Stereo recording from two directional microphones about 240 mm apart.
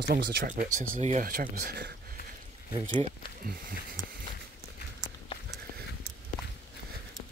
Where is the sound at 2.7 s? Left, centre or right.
Right.